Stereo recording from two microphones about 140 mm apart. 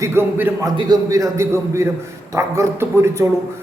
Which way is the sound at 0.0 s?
15° right (ahead or behind).